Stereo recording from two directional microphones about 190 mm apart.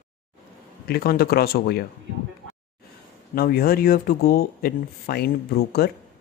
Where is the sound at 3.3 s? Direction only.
55° left (ahead or behind).